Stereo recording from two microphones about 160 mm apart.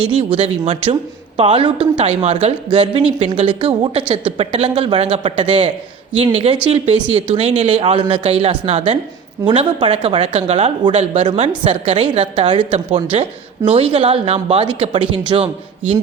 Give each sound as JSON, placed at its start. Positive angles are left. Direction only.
{"t": 0.2, "sound": "speech", "side_deg": -40}